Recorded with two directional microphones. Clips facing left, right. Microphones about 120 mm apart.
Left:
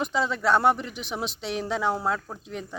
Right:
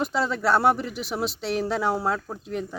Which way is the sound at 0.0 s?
5° right (ahead or behind).